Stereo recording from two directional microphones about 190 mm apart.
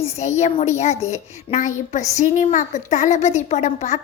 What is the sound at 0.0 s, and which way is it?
A woman's voice, 35° left (ahead or behind).